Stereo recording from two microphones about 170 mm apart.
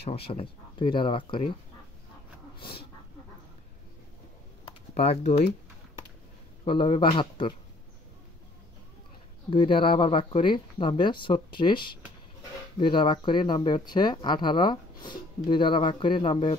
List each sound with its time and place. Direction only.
0.1 s speech: 35° left (ahead or behind)
4.6 s computer keyboard: 35° left (ahead or behind)
6.6 s speech: 30° left (ahead or behind)
9.5 s speech: 30° left (ahead or behind)